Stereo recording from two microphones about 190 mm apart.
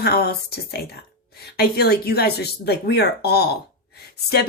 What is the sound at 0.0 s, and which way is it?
Speech, 55° left (ahead or behind).